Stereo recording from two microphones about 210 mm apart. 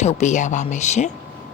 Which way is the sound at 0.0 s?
35° left (ahead or behind).